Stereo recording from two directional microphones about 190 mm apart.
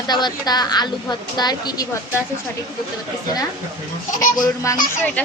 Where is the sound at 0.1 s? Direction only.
20° left (ahead or behind).